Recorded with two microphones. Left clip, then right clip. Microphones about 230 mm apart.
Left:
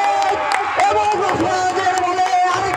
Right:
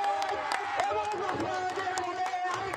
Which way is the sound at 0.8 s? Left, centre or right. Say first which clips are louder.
Left 15 dB; left.